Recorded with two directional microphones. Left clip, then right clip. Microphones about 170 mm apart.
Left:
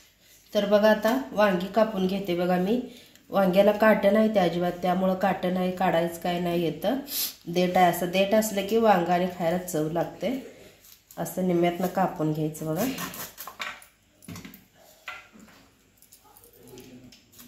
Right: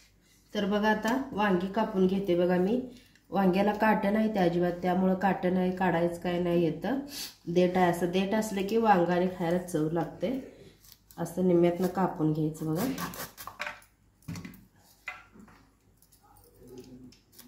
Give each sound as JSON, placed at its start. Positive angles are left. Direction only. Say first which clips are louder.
{"t": 0.5, "sound": "speech", "louder": "left 8 dB", "side_deg": 15}
{"t": 11.1, "sound": "speech", "louder": "even", "side_deg": 20}